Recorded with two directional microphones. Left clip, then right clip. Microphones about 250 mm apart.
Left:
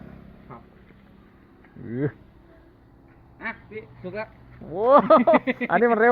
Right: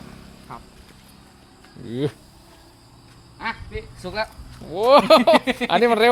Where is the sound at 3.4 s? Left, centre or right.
Right.